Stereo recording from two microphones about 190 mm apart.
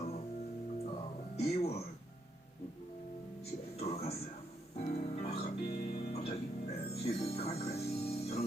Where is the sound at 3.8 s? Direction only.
35° left (ahead or behind).